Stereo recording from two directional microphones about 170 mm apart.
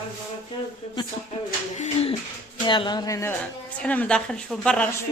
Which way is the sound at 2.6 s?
25° left (ahead or behind).